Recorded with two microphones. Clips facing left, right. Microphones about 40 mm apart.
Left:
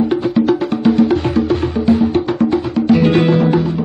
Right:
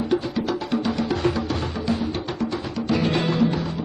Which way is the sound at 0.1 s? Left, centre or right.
Left.